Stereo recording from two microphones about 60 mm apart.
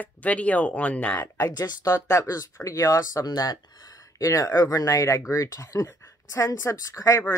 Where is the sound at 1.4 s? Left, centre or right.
Left.